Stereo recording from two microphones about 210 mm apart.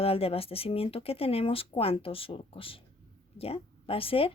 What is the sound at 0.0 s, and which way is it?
A woman's voice, 25° left (ahead or behind).